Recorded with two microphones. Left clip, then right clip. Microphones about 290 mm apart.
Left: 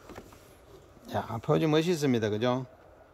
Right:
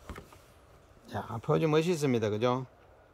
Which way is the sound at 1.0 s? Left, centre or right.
Centre.